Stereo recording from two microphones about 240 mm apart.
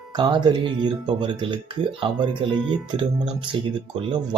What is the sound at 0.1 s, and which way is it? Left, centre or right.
Speech, centre.